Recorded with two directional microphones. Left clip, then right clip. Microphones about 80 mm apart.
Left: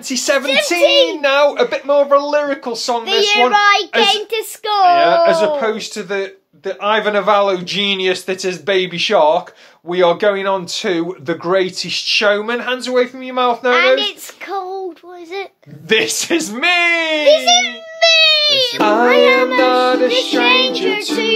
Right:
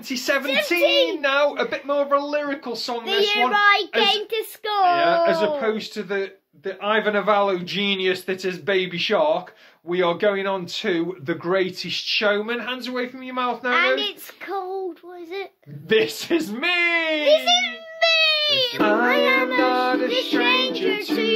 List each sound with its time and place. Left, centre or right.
0.1 s speech: left
0.8 s music: centre
1.2 s speech: left
3.1 s music: centre
3.5 s a child's voice: centre
4.8 s speech: left
13.7 s a child's voice: centre
15.9 s speech: left
17.5 s a sound: right
18.8 s speech: left
19.0 s music: centre
19.6 s speech: left
20.2 s music: centre